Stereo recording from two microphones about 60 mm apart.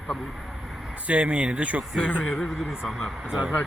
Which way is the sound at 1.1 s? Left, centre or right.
Right.